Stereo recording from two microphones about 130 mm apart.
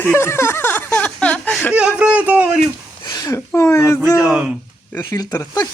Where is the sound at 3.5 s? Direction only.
20° left (ahead or behind).